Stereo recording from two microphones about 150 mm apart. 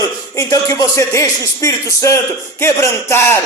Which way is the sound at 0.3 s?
20° left (ahead or behind).